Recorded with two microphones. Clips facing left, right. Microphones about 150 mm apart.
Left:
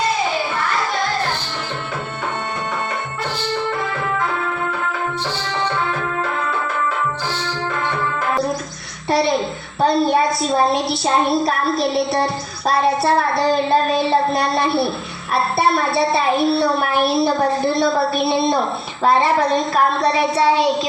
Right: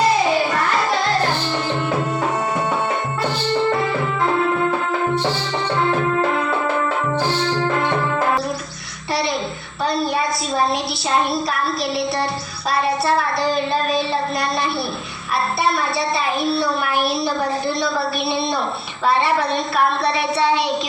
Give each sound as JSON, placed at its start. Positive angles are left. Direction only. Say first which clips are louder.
{"t": 10.7, "sound": "child singing", "louder": "left 3 dB", "side_deg": 50}
{"t": 16.0, "sound": "child singing", "louder": "left 4 dB", "side_deg": 55}
{"t": 18.3, "sound": "child singing", "louder": "left 4 dB", "side_deg": 45}